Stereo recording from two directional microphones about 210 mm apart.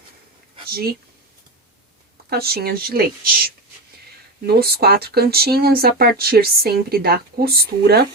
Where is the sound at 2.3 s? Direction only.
50° right (ahead or behind).